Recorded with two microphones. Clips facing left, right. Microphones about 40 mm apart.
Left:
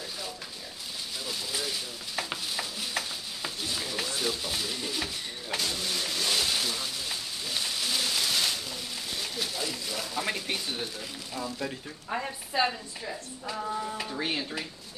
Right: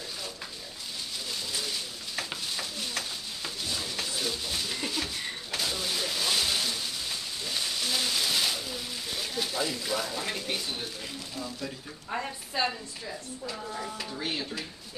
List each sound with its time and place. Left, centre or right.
1.3 s stir: centre
5.6 s a sound: centre
11.3 s speech: centre
12.6 s speech: centre